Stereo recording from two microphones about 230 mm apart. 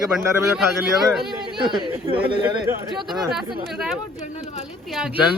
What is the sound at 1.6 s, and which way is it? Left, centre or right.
Speech, right.